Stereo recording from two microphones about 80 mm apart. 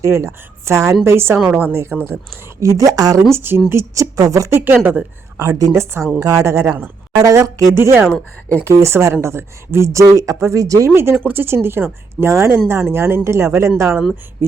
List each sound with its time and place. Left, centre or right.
0.0 s speech: right
2.6 s speech: right
3.3 s speech: right
4.2 s speech: right
4.5 s speech: right
5.4 s speech: right
5.8 s speech: right
6.7 s speech: right
7.2 s speech: right
7.8 s speech: right
10.8 s speech: right